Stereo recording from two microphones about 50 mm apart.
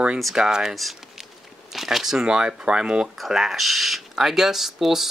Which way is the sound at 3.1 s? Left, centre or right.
Centre.